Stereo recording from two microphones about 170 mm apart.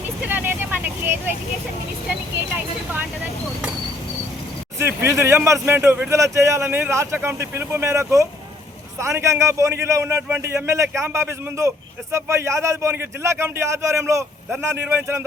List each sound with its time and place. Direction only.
0.3 s speech: 10° right (ahead or behind)
4.8 s speech: 15° right (ahead or behind)